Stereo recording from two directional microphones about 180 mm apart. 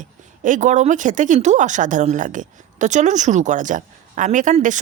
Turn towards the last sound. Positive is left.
turn(degrees=-45)  # may be behind; listen again after turning